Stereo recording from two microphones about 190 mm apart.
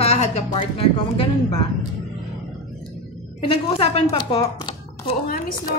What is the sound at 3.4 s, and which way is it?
Speech, 30° left (ahead or behind).